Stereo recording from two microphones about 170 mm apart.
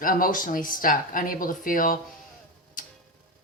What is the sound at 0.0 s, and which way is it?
Speech, 55° left (ahead or behind).